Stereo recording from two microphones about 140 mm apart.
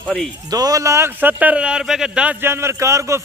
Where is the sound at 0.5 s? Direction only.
25° right (ahead or behind).